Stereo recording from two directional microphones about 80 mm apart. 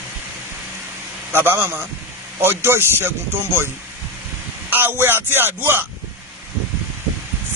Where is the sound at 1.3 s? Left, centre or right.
Right.